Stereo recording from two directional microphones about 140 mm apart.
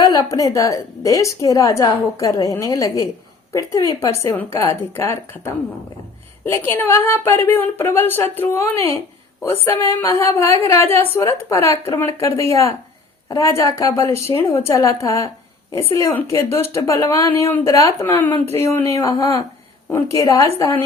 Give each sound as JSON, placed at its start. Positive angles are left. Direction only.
{"t": 0.0, "sound": "a woman's voice", "side_deg": 25}
{"t": 13.2, "sound": "a woman's voice", "side_deg": 25}